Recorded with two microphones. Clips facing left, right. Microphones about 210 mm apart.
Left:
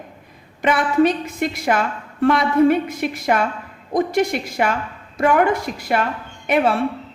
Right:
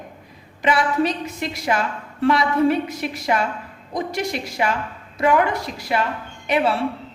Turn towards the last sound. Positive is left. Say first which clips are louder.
# left 2 dB
turn(degrees=50)  # may be behind; listen again after turning